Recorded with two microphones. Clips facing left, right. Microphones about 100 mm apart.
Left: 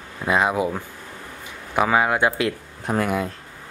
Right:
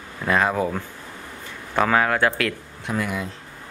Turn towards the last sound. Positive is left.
turn(degrees=50)  # may be behind; listen again after turning